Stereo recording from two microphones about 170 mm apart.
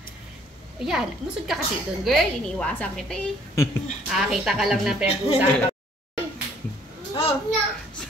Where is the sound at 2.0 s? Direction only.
5° left (ahead or behind).